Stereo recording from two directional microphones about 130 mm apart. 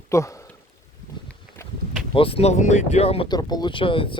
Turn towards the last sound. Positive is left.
turn(degrees=40)  # may be behind; listen again after turning